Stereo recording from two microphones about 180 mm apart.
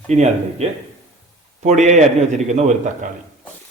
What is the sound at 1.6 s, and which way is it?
Speech, 40° right (ahead or behind).